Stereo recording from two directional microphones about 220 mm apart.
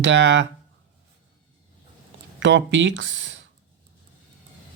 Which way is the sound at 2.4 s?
55° right (ahead or behind).